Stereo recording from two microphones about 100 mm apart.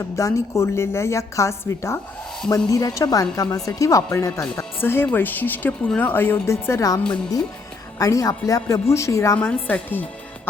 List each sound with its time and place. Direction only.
0.2 s a woman's voice: 30° left (ahead or behind)
9.4 s a woman's voice: 15° left (ahead or behind)